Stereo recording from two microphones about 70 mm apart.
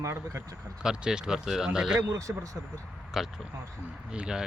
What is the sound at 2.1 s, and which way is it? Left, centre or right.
Speech, right.